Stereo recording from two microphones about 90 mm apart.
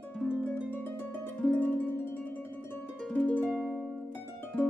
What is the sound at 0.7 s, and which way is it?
Harp, 20° left (ahead or behind).